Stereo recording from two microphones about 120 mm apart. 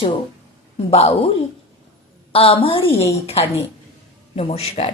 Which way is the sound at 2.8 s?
20° left (ahead or behind).